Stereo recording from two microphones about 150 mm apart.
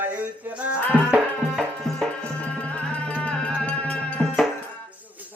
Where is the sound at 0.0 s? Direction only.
10° right (ahead or behind); by 4.4 s 10° left (ahead or behind).